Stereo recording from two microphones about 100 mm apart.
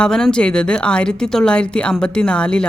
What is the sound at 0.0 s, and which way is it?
Speech, 5° left (ahead or behind).